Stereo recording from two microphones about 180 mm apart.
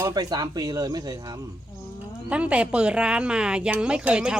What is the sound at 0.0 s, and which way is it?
Speech, 20° right (ahead or behind).